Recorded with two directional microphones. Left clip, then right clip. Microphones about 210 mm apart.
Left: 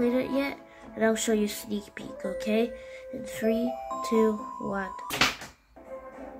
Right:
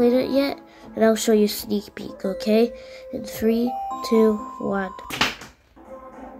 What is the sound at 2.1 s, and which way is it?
Speech, 20° right (ahead or behind).